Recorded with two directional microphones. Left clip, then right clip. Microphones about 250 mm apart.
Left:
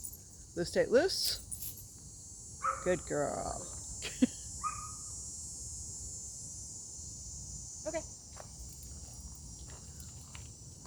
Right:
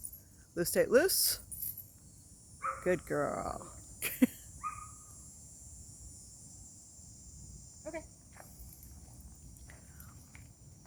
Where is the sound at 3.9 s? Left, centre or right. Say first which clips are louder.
Right 2 dB; right.